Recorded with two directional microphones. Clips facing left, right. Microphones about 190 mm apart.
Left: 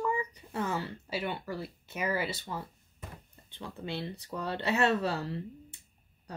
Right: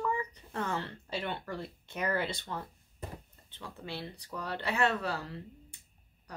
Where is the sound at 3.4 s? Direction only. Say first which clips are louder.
Left 5 dB; 20° left (ahead or behind).